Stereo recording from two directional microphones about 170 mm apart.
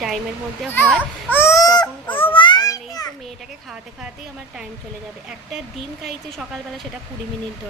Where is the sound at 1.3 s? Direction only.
15° left (ahead or behind).